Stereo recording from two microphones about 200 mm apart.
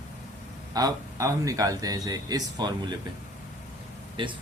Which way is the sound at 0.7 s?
20° right (ahead or behind).